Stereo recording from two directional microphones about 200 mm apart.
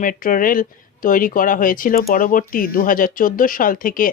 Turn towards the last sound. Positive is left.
turn(degrees=45)  # may be behind; listen again after turning